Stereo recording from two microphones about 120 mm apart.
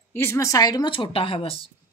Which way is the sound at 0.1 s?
20° left (ahead or behind).